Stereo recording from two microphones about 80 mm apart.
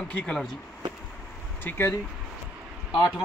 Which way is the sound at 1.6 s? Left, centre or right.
Left.